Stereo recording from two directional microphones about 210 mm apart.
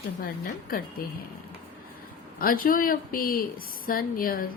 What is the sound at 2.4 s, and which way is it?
A woman's voice, 40° left (ahead or behind).